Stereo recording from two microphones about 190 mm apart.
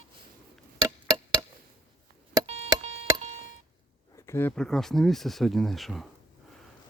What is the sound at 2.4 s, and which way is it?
Music, 35° right (ahead or behind).